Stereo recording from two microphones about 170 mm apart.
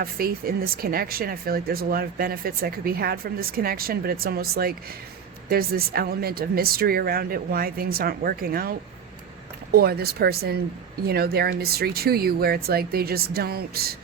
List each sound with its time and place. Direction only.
0.0 s speech: 60° right (ahead or behind)
9.7 s speech: 65° right (ahead or behind)